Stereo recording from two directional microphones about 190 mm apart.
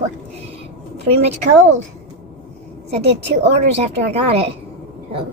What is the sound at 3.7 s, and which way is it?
Speech, 30° right (ahead or behind).